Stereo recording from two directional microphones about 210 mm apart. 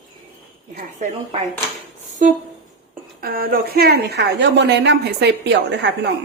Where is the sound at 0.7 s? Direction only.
35° right (ahead or behind).